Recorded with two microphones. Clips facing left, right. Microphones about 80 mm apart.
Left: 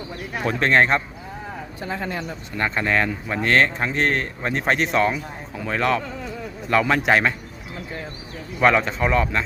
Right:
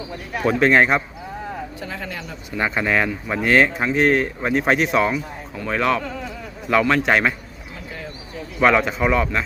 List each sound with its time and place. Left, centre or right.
0.4 s speech: centre
1.8 s speech: left
2.6 s speech: centre
8.6 s speech: centre